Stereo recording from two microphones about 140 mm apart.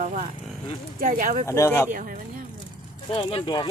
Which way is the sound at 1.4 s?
20° left (ahead or behind).